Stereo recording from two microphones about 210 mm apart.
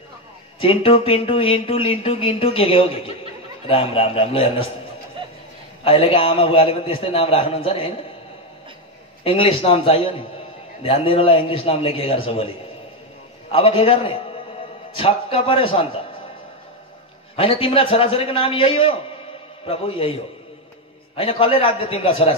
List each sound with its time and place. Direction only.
0.6 s speech: 25° left (ahead or behind)
5.9 s speech: 25° left (ahead or behind)
9.2 s speech: 25° left (ahead or behind)
13.5 s speech: 25° left (ahead or behind)
17.4 s speech: 25° left (ahead or behind)
21.2 s speech: 25° left (ahead or behind)